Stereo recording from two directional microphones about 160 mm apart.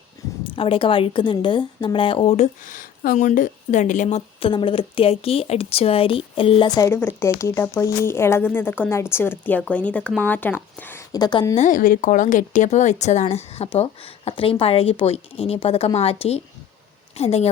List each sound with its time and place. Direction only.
0.4 s speech: 35° left (ahead or behind)
2.3 s a woman's voice: 50° left (ahead or behind); by 11.0 s 10° left (ahead or behind)
11.1 s a woman's voice: 25° left (ahead or behind)
11.5 s speech: 50° left (ahead or behind)